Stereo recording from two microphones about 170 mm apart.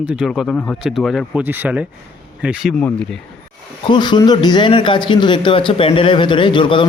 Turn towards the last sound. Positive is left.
turn(degrees=30)  # may be behind; listen again after turning